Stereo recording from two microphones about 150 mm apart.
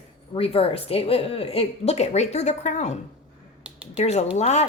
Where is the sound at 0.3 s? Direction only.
40° left (ahead or behind).